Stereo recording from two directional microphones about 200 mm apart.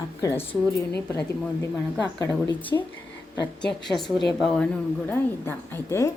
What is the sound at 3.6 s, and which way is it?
A woman's voice, centre (ahead or behind).